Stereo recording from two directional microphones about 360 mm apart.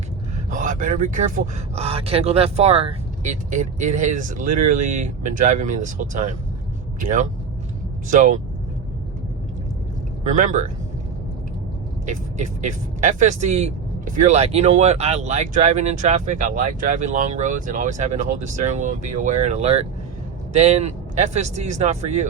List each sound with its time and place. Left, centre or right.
0.5 s speech: right
8.0 s speech: right
10.2 s speech: right
12.0 s speech: centre